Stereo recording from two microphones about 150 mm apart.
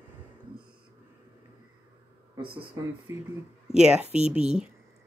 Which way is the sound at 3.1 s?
15° right (ahead or behind).